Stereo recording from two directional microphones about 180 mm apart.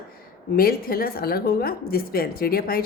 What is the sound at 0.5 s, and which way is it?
A woman's voice, 55° left (ahead or behind).